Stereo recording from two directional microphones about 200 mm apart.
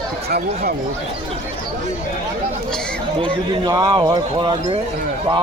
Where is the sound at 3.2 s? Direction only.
25° right (ahead or behind).